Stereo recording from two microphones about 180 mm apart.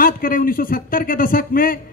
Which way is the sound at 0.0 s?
50° left (ahead or behind).